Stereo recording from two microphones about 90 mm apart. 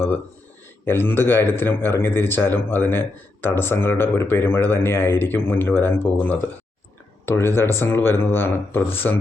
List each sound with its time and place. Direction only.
0.9 s a man's voice: 25° left (ahead or behind)